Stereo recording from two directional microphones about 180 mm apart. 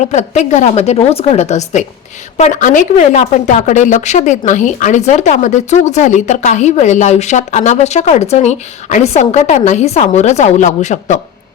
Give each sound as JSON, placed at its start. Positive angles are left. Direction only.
{"t": 0.0, "sound": "a woman's voice", "side_deg": 40}